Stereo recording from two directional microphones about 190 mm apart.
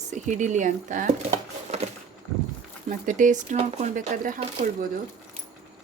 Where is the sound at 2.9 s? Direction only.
45° right (ahead or behind).